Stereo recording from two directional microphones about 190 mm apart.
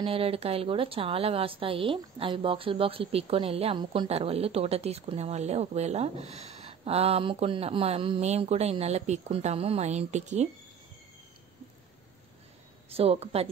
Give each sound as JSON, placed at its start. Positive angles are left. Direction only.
{"t": 0.0, "sound": "a woman's voice", "side_deg": -30}
{"t": 12.9, "sound": "a woman's voice", "side_deg": -30}